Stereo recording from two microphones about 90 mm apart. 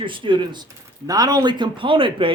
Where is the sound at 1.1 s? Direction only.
45° right (ahead or behind); by 2.3 s 75° right (ahead or behind).